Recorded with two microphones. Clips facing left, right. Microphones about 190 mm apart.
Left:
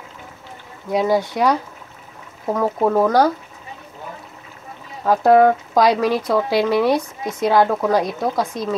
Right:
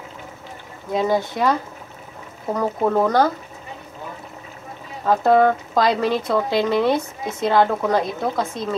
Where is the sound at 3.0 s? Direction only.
5° left (ahead or behind).